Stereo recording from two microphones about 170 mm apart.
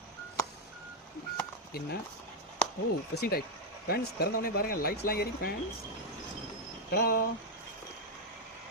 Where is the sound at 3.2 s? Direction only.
65° left (ahead or behind).